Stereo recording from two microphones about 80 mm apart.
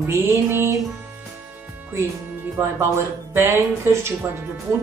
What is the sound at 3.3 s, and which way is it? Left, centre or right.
Speech, right.